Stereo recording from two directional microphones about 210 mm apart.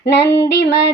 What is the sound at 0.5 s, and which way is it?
Female singing, 55° left (ahead or behind).